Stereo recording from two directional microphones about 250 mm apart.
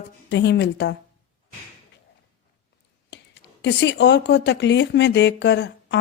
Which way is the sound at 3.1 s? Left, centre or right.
Left.